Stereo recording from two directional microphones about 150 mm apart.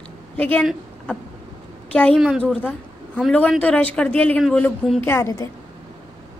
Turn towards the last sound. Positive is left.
turn(degrees=20)  # may be behind; listen again after turning